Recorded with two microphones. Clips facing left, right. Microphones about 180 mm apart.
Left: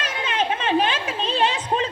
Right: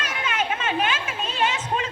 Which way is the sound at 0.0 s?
30° left (ahead or behind).